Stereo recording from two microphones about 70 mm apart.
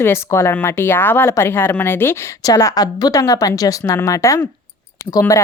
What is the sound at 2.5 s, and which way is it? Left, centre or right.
A woman's voice, left.